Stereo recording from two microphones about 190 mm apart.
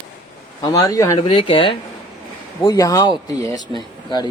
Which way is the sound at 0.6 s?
20° left (ahead or behind).